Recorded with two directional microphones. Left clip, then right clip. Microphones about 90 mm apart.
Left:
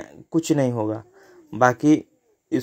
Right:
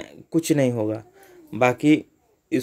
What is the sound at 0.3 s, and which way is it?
Speech, 30° right (ahead or behind).